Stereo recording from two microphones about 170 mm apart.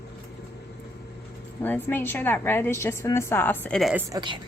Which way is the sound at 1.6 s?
10° left (ahead or behind).